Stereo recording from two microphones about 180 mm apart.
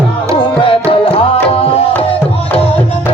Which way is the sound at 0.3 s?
30° left (ahead or behind).